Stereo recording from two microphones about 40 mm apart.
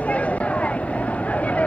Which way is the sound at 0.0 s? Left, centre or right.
Left.